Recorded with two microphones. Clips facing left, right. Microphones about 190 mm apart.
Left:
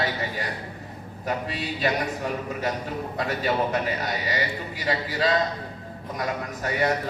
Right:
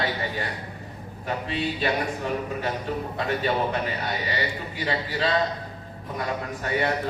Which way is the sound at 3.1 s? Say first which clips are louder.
Left 1 dB; 40° left (ahead or behind).